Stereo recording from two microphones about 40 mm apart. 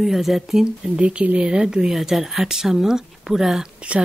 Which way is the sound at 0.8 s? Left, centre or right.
Right.